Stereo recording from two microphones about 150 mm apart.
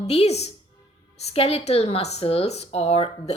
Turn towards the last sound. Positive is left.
turn(degrees=40)  # may be behind; listen again after turning